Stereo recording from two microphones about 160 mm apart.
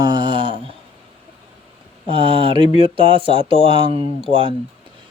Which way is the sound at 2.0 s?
30° right (ahead or behind).